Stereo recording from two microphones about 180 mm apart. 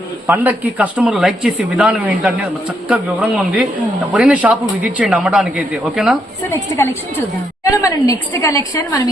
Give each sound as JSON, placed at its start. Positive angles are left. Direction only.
{"t": 0.3, "sound": "speech", "side_deg": -10}
{"t": 6.5, "sound": "a woman's voice", "side_deg": 15}